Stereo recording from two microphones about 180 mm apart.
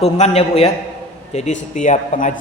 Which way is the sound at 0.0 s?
35° left (ahead or behind).